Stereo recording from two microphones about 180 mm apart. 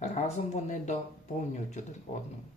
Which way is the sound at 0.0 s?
35° left (ahead or behind).